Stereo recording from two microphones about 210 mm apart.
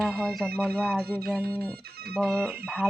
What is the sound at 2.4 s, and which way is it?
Speech, 10° right (ahead or behind).